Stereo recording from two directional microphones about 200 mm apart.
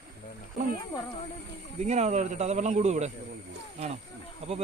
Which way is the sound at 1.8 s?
35° right (ahead or behind).